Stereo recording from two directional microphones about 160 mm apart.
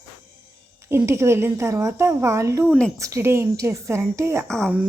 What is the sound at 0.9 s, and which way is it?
A woman's voice, 15° right (ahead or behind).